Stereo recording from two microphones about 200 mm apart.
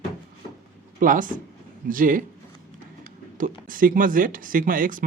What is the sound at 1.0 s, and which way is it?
Speech, 40° right (ahead or behind).